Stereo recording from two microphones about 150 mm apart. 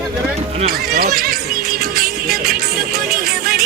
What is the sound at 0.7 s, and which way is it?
Music, 90° right.